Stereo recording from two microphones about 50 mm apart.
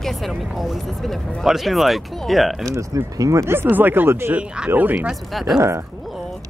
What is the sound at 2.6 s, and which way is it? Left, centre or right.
Speech, right.